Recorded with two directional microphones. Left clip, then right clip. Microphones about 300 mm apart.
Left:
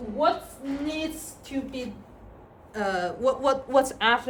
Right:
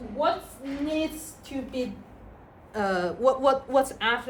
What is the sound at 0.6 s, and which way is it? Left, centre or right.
Speech, left.